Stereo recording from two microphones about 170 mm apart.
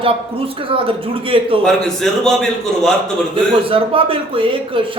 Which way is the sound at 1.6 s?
5° left (ahead or behind).